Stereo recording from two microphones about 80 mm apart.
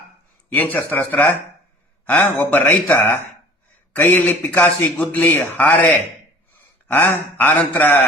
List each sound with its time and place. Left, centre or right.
0.5 s a man's voice: left